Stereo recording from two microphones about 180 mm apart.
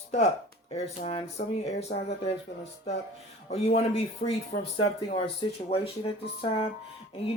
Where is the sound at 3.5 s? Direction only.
35° left (ahead or behind).